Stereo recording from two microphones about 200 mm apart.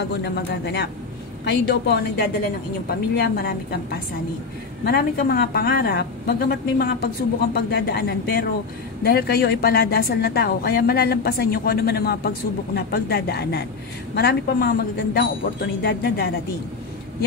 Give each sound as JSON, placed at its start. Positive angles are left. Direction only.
{"t": 0.1, "sound": "a man's voice", "side_deg": 55}
{"t": 4.8, "sound": "a woman's voice", "side_deg": 50}